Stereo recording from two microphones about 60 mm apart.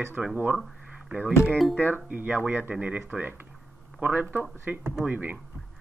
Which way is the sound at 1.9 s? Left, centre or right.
Right.